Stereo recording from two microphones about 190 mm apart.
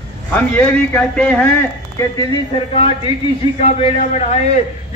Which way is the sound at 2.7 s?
30° left (ahead or behind).